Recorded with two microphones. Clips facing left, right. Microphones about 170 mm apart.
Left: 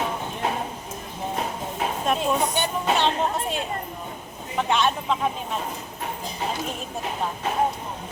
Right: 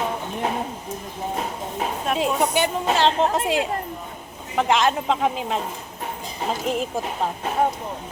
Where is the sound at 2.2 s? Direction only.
90° right.